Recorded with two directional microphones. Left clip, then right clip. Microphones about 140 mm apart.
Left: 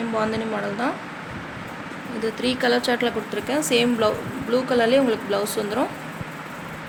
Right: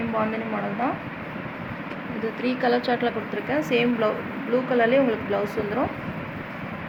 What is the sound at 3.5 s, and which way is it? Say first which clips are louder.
Speech: left 2 dB; 70° left (ahead or behind).